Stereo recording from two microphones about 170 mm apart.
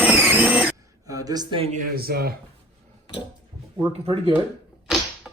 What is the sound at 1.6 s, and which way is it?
Speech, 45° right (ahead or behind).